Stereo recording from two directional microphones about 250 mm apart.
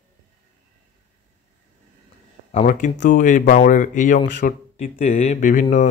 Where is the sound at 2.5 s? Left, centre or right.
Left.